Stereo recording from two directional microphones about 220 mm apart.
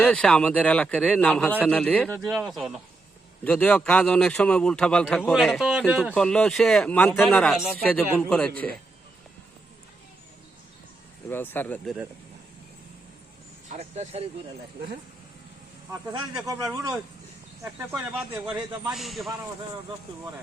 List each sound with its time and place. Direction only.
0.0 s a man's voice: 5° left (ahead or behind)
11.3 s speech: 10° left (ahead or behind)
13.7 s speech: 30° right (ahead or behind)
16.5 s speech: 15° right (ahead or behind)
18.9 s a man's voice: centre (ahead or behind)